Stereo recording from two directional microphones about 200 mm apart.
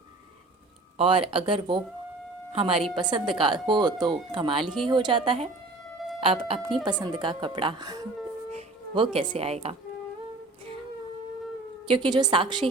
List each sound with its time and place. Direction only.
0.9 s a woman's voice: 25° right (ahead or behind)
4.6 s speech: centre (ahead or behind)
4.9 s speech: 25° right (ahead or behind)
11.9 s speech: 20° right (ahead or behind)